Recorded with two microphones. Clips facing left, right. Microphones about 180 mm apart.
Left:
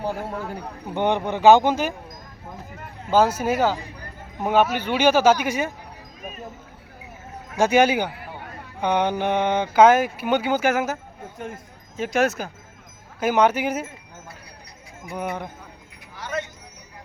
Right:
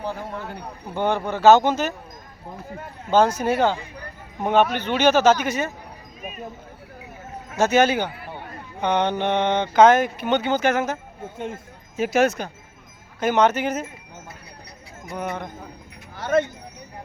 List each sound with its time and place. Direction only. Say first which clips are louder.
0.3 s speech: left 2 dB; 5° left (ahead or behind)
0.9 s speech: left 1 dB; 20° left (ahead or behind)
3.1 s speech: right 1 dB; 5° left (ahead or behind)
7.5 s speech: even; 10° left (ahead or behind)
11.9 s speech: right 2 dB; 5° right (ahead or behind); by 13.8 s 10° left (ahead or behind)
15.1 s speech: even; 10° left (ahead or behind)
16.1 s speech: right 9 dB; 55° right (ahead or behind)